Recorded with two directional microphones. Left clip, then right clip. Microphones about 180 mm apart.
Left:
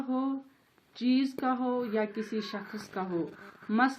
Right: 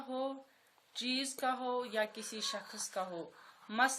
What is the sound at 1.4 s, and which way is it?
Speech, 25° right (ahead or behind).